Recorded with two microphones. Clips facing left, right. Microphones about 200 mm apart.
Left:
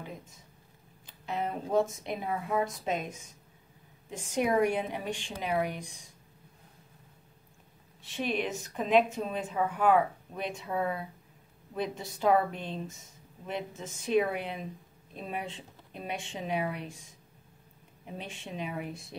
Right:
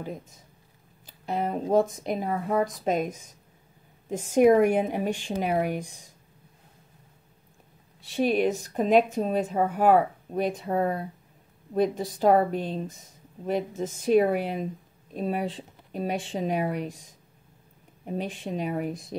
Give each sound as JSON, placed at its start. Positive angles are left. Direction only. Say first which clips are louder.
{"t": 1.0, "sound": "speech", "louder": "right 5 dB", "side_deg": -40}
{"t": 4.2, "sound": "speech", "louder": "right 9 dB", "side_deg": -45}
{"t": 8.2, "sound": "speech", "louder": "right 9 dB", "side_deg": -45}
{"t": 12.4, "sound": "speech", "louder": "right 6 dB", "side_deg": -40}
{"t": 18.0, "sound": "speech", "louder": "right 10 dB", "side_deg": -40}